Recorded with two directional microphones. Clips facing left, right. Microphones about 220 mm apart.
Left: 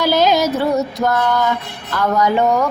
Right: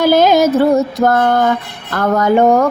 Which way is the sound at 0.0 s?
50° right (ahead or behind).